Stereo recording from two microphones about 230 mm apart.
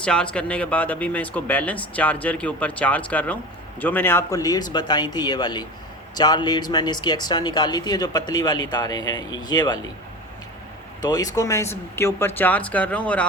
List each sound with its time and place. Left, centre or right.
0.0 s speech: centre
11.0 s speech: centre